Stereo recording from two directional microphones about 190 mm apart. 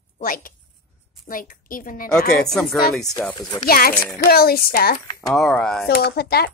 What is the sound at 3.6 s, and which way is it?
A woman's voice, 50° left (ahead or behind).